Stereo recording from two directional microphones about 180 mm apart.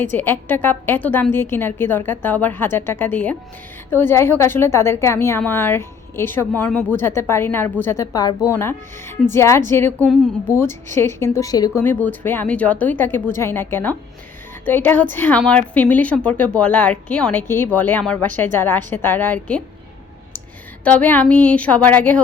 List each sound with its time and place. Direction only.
0.0 s a woman's voice: 10° left (ahead or behind)
20.8 s a woman's voice: 10° left (ahead or behind)